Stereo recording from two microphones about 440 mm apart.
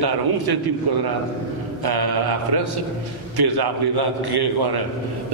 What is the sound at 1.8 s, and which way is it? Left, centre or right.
A man's voice, right.